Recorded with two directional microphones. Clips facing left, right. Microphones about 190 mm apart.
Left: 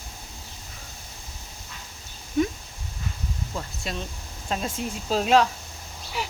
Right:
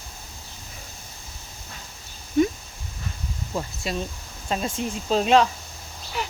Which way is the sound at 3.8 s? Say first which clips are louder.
Right 4 dB; 5° right (ahead or behind).